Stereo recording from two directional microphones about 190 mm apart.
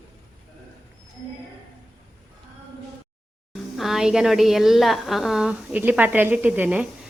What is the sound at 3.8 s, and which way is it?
A woman's voice, centre (ahead or behind).